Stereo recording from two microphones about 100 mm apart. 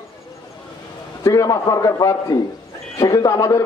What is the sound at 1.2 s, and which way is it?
A man's voice, 35° left (ahead or behind).